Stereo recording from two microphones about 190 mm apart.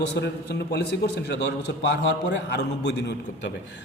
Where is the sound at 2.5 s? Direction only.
65° left (ahead or behind).